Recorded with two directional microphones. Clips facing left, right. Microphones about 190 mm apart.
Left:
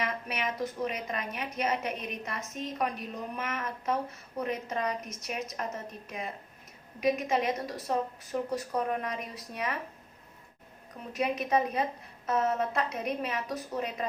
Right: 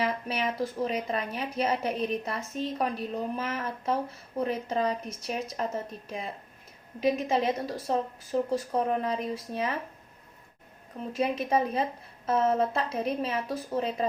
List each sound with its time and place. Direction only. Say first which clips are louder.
0.0 s a woman's voice: right 4 dB; 30° right (ahead or behind)
11.1 s a woman's voice: right 1 dB; 30° right (ahead or behind)